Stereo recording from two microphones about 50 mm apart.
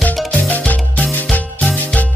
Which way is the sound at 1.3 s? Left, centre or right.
Left.